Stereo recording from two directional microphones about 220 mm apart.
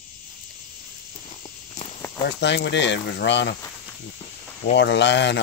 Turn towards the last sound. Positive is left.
turn(degrees=55)  # may be behind; listen again after turning